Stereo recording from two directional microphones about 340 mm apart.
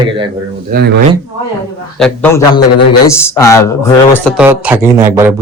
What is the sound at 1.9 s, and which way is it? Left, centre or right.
A man's voice, centre.